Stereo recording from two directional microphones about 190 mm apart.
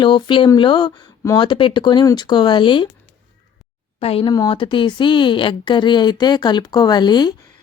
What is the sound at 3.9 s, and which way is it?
Speech, 30° left (ahead or behind).